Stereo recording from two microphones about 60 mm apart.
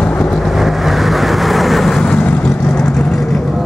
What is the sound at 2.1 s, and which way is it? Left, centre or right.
Vehicle, left.